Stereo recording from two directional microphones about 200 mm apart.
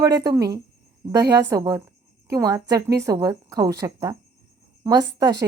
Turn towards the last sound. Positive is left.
turn(degrees=-20)  # may be behind; listen again after turning